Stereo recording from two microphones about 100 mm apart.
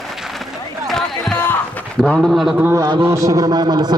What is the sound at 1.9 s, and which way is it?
Speech, 5° left (ahead or behind).